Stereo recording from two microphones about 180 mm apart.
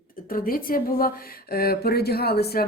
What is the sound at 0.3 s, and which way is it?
Speech, 50° left (ahead or behind).